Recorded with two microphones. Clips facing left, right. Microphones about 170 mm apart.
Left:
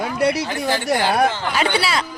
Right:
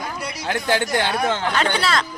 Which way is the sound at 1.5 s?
10° left (ahead or behind).